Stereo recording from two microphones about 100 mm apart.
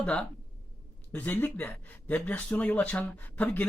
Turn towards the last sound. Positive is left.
turn(degrees=15)  # may be behind; listen again after turning